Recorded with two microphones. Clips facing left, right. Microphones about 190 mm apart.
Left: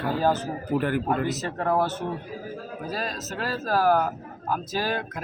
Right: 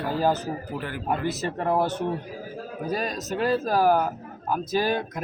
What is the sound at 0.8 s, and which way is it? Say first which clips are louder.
Speech: left 8 dB; 50° left (ahead or behind).